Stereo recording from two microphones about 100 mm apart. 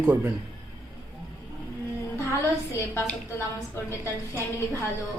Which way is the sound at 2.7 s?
30° left (ahead or behind).